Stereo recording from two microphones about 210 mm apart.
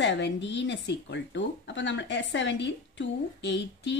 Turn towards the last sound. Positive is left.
turn(degrees=55)  # may be behind; listen again after turning